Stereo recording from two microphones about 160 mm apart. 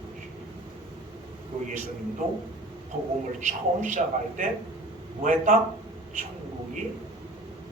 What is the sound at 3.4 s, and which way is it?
A man's voice, 50° right (ahead or behind).